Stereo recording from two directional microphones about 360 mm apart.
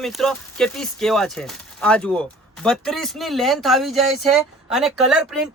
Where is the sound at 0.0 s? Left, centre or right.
Centre.